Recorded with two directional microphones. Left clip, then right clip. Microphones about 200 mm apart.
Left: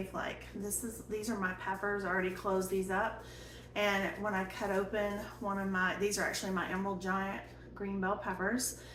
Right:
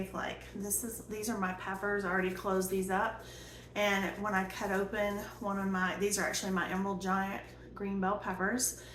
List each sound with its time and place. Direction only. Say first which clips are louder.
0.1 s a woman's voice: even; 15° right (ahead or behind)